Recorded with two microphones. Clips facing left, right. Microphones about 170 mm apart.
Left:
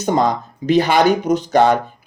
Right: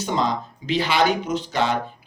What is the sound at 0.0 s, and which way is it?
Speech, 45° left (ahead or behind).